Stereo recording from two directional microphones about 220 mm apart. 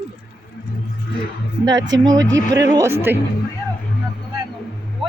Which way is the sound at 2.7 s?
10° right (ahead or behind).